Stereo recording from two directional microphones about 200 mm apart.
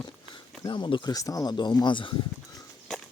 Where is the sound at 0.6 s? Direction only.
25° left (ahead or behind).